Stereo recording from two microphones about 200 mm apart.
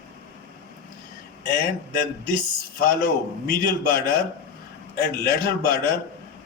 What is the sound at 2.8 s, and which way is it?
A man's voice, 45° left (ahead or behind).